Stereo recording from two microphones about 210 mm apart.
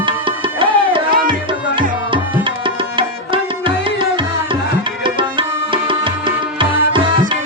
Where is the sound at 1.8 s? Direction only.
25° right (ahead or behind).